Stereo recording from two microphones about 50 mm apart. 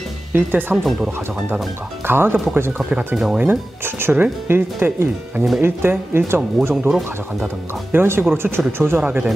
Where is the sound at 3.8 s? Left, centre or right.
Right.